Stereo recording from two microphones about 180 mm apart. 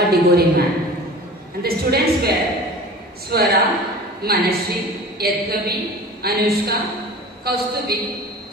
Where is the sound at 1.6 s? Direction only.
60° right (ahead or behind).